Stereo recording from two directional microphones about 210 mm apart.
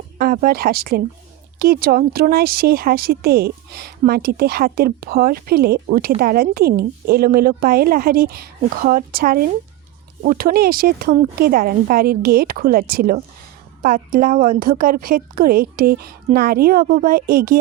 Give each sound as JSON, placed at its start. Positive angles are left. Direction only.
{"t": 0.2, "sound": "speech", "side_deg": -45}